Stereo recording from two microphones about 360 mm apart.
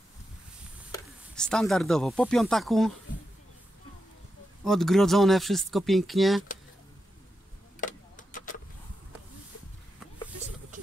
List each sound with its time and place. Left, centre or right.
0.9 s speech: centre
4.6 s speech: centre
7.8 s a sound: left